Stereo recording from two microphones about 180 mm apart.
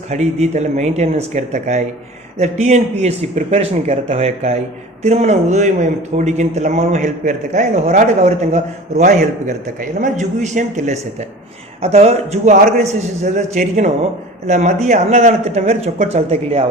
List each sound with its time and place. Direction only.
0.1 s a man's voice: 40° right (ahead or behind)